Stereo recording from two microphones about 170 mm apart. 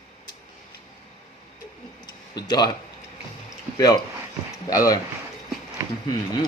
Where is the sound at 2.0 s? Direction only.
25° left (ahead or behind).